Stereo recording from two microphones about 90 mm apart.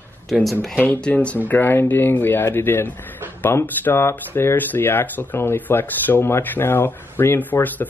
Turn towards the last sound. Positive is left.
turn(degrees=20)  # may be behind; listen again after turning